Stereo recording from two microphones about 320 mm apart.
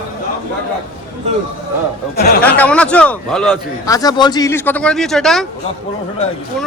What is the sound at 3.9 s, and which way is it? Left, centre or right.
A man's voice, centre.